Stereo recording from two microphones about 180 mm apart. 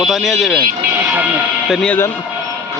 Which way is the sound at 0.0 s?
Centre (ahead or behind).